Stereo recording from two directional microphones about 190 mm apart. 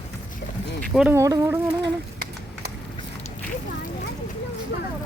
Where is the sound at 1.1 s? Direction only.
15° right (ahead or behind).